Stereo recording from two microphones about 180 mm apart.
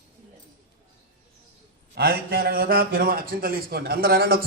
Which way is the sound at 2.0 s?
60° right (ahead or behind).